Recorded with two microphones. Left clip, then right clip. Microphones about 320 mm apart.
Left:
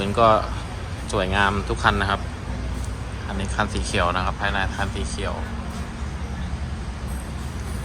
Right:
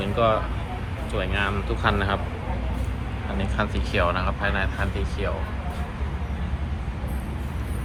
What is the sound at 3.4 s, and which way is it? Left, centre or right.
Speech, centre.